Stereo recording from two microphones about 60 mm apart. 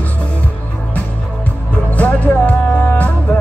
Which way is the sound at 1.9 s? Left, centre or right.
Left.